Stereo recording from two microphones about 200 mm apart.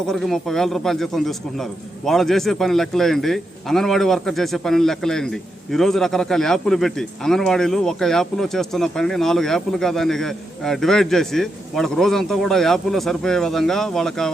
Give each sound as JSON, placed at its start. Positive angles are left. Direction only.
{"t": 0.1, "sound": "a man's voice", "side_deg": 0}